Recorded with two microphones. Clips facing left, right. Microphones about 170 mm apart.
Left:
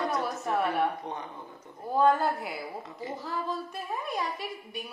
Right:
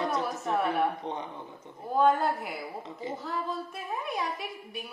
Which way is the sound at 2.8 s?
20° right (ahead or behind).